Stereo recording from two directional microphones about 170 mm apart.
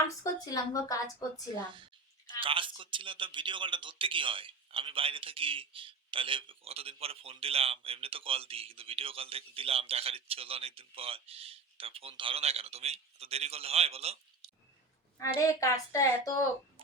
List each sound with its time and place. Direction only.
0.1 s a woman's voice: 20° left (ahead or behind)
2.4 s speech: 30° right (ahead or behind)
15.4 s a woman's voice: 20° left (ahead or behind)